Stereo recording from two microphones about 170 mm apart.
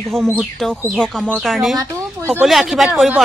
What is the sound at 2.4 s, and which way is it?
Speech, centre (ahead or behind).